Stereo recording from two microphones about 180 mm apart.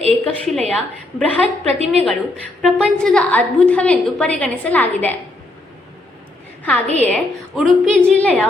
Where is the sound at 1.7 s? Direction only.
35° right (ahead or behind).